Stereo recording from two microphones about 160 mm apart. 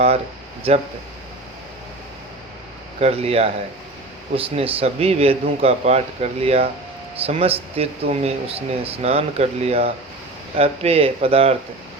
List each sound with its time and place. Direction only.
0.7 s speech: 40° right (ahead or behind)
3.0 s speech: 40° right (ahead or behind)